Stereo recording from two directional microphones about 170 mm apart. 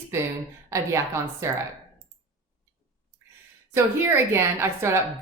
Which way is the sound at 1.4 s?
15° right (ahead or behind).